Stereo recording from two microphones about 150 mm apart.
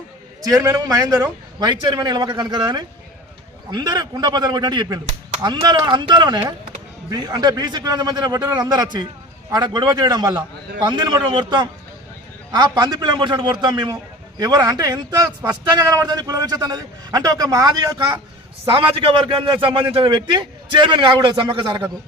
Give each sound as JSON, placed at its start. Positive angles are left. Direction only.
{"t": 0.5, "sound": "a man's voice", "side_deg": -20}